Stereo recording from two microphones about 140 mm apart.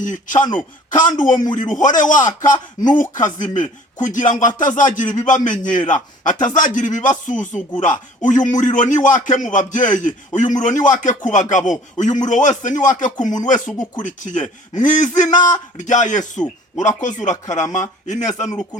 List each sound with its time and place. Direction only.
0.0 s speech: 65° left (ahead or behind)
13.2 s speech: 30° left (ahead or behind)
14.0 s speech: 65° left (ahead or behind)